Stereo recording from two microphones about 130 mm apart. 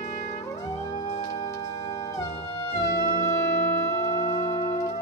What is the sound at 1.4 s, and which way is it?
Music, 25° left (ahead or behind).